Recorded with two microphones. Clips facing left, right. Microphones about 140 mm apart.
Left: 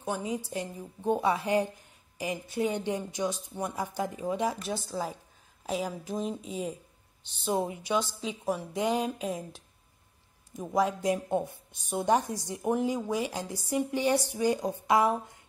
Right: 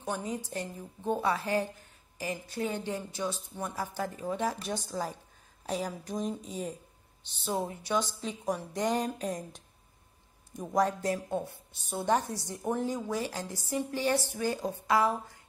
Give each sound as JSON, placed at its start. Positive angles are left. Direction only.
{"t": 0.0, "sound": "a woman's voice", "side_deg": 10}
{"t": 10.6, "sound": "a woman's voice", "side_deg": 5}